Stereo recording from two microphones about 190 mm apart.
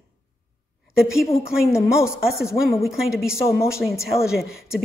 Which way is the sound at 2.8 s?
5° right (ahead or behind).